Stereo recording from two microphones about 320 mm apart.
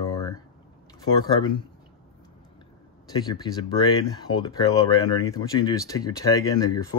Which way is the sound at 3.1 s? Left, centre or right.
Centre.